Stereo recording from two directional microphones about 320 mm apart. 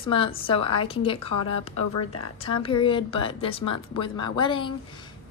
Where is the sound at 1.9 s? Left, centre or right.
Left.